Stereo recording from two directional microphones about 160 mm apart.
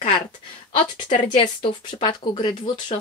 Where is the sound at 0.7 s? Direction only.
30° left (ahead or behind).